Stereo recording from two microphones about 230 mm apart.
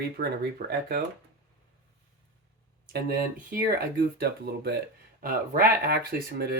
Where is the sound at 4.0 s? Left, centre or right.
Right.